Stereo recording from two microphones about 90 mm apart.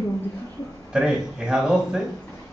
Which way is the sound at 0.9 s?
10° right (ahead or behind).